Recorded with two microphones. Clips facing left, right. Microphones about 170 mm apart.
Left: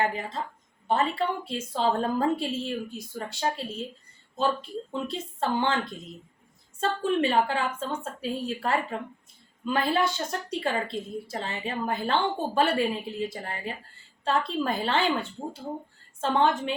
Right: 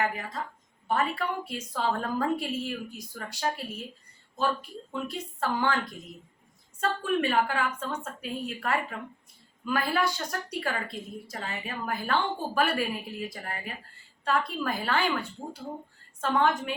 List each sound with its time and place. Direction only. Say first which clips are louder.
0.0 s a woman's voice: left 2 dB; 25° left (ahead or behind)